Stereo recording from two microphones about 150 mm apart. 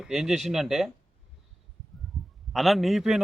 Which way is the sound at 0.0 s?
5° right (ahead or behind).